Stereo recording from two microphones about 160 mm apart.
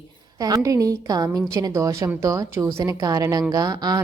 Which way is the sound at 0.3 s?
20° right (ahead or behind).